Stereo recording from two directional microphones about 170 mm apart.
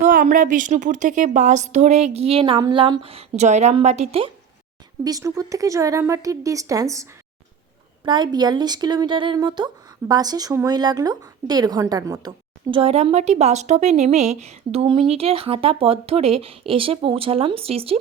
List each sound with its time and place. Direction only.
0.0 s a woman's voice: 50° right (ahead or behind); by 4.3 s 35° right (ahead or behind)
5.0 s speech: 20° right (ahead or behind)
12.7 s a woman's voice: 35° right (ahead or behind)